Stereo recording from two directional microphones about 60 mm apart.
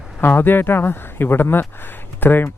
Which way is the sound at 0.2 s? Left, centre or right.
Left.